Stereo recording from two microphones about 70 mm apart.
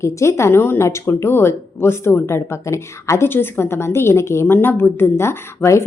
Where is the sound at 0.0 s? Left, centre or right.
Left.